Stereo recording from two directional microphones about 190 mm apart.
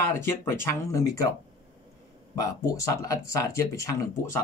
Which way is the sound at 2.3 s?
15° left (ahead or behind).